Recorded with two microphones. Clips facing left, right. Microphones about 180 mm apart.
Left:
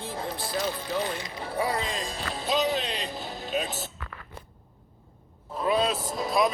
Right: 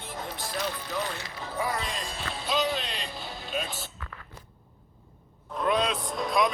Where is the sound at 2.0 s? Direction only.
40° left (ahead or behind).